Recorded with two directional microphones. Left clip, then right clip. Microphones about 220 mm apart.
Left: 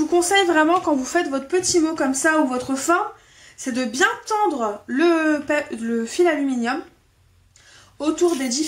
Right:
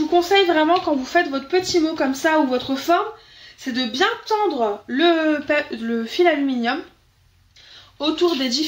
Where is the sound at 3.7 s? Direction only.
20° left (ahead or behind).